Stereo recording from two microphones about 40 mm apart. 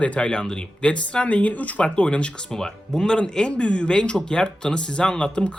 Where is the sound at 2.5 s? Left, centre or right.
Centre.